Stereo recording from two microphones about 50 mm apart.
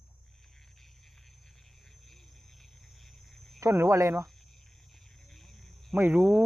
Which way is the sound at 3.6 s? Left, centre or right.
Right.